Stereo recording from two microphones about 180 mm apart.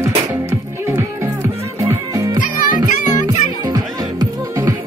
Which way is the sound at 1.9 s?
15° right (ahead or behind).